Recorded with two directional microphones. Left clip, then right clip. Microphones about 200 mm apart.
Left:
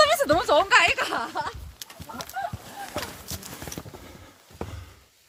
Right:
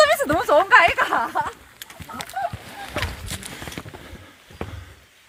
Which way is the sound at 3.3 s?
30° left (ahead or behind).